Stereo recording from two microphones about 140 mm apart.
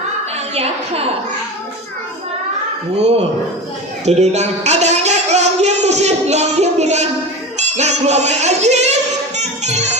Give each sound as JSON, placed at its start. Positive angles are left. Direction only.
{"t": 0.5, "sound": "a woman's voice", "side_deg": -45}
{"t": 3.0, "sound": "a woman's voice", "side_deg": -50}
{"t": 4.0, "sound": "a sound", "side_deg": -50}
{"t": 7.6, "sound": "music", "side_deg": -55}